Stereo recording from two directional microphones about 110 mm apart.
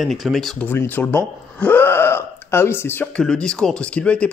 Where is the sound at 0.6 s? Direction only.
20° left (ahead or behind).